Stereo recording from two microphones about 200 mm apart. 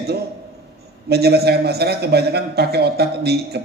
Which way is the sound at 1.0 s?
55° right (ahead or behind).